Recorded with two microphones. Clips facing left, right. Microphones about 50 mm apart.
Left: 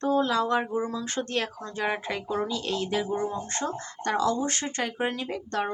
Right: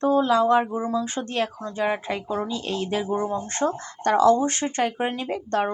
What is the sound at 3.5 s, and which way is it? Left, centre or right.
Speech, right.